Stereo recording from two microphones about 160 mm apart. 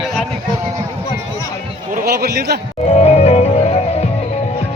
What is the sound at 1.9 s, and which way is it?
Speech, 75° right (ahead or behind).